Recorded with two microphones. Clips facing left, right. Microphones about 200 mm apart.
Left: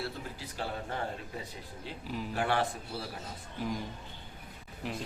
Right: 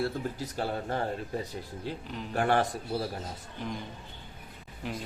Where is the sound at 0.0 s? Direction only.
45° right (ahead or behind).